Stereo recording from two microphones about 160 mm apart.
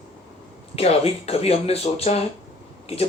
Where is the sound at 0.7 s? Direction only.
40° left (ahead or behind).